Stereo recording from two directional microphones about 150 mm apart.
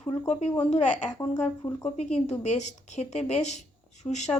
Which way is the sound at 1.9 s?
50° left (ahead or behind).